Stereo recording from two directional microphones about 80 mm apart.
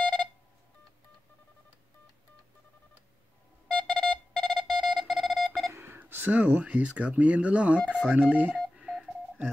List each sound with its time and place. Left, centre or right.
0.0 s telephone dialing: centre
3.6 s a sound: centre
5.7 s speech: right
8.7 s telephone dialing: centre